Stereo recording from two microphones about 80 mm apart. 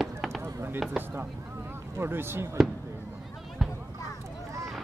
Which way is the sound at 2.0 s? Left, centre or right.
Right.